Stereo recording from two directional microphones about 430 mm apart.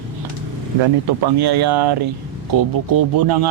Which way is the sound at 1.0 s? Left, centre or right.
Right.